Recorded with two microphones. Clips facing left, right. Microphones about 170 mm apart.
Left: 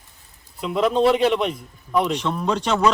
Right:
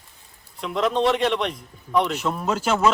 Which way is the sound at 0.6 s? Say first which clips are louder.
Left 3 dB; 5° left (ahead or behind).